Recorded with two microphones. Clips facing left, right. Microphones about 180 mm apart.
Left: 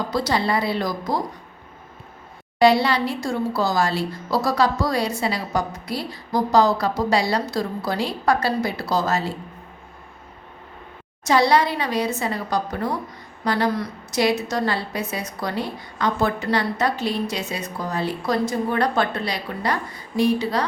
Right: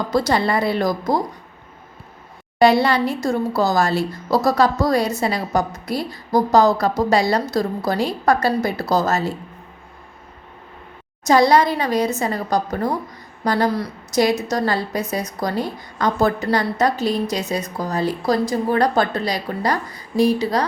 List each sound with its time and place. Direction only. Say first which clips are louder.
0.1 s speech: right 4 dB; 50° right (ahead or behind)
2.6 s speech: right 2 dB; 50° right (ahead or behind)
11.3 s a woman's voice: right 3 dB; 45° right (ahead or behind)